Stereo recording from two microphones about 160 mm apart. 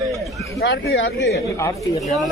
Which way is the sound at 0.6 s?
90° left.